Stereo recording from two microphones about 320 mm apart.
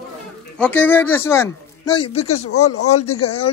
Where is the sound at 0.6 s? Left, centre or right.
Centre.